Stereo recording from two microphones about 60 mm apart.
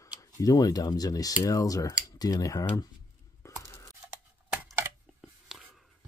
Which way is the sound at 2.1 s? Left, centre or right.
Left.